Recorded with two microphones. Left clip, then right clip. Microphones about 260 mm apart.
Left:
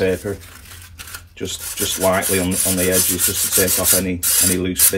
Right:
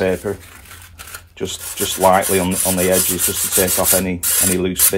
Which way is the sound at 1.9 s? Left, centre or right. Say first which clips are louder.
Right 4 dB; right.